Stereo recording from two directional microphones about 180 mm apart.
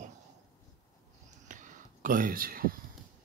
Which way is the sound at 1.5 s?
45° right (ahead or behind).